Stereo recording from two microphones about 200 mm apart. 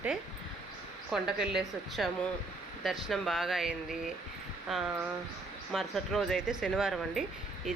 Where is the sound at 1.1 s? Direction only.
Centre (ahead or behind).